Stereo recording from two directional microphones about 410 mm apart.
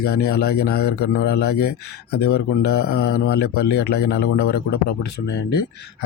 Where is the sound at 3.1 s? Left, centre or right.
Left.